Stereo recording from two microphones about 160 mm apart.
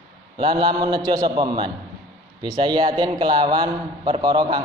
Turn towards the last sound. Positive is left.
turn(degrees=-30)  # may be behind; listen again after turning